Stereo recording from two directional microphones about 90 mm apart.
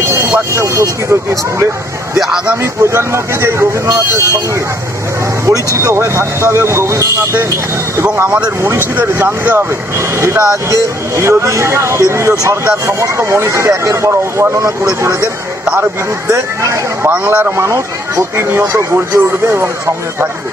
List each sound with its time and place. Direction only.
0.0 s vehicle: 30° right (ahead or behind)
2.1 s a man's voice: 5° right (ahead or behind)
2.6 s speech: 30° right (ahead or behind)
5.8 s speech: 35° right (ahead or behind)
8.6 s speech: 25° right (ahead or behind)
15.6 s a man's voice: 15° right (ahead or behind)
16.3 s speech: 35° right (ahead or behind)
17.1 s speech: 15° right (ahead or behind)
17.6 s speech: 35° right (ahead or behind)